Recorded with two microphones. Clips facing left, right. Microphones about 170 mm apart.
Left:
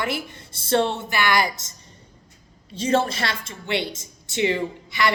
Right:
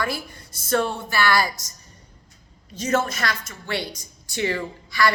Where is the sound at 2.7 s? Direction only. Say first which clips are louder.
Left 2 dB; 30° left (ahead or behind).